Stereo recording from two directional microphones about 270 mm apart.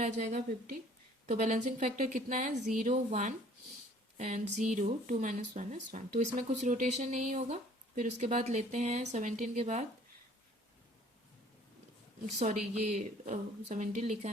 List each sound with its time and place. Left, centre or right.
0.0 s speech: right
12.2 s speech: right